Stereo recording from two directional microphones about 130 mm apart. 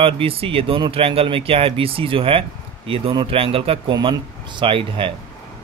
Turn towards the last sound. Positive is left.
turn(degrees=-40)  # may be behind; listen again after turning